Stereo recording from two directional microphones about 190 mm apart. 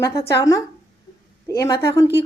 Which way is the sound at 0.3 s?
15° left (ahead or behind).